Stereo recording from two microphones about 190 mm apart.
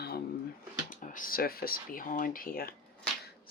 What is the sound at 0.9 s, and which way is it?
Speech, 45° left (ahead or behind).